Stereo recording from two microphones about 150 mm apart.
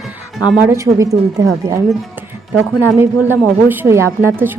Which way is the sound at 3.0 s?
15° right (ahead or behind).